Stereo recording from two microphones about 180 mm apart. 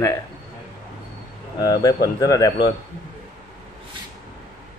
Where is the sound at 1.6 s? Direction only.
20° left (ahead or behind).